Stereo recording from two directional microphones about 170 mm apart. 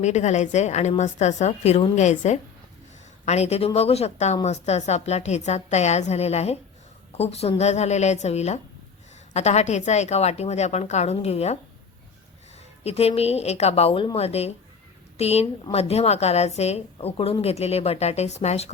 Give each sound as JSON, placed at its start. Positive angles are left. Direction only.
{"t": 0.0, "sound": "a woman's voice", "side_deg": 40}
{"t": 12.8, "sound": "a woman's voice", "side_deg": 40}